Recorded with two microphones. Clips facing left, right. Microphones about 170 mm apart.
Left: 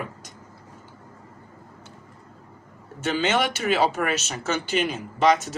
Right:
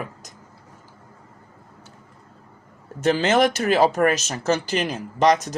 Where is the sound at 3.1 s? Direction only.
40° right (ahead or behind).